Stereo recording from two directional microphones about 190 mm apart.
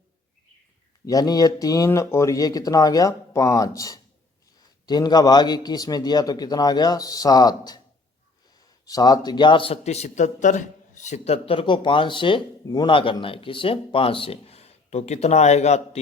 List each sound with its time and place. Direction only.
1.0 s a man's voice: 20° left (ahead or behind)
8.9 s a man's voice: 20° left (ahead or behind); by 16.0 s 35° left (ahead or behind)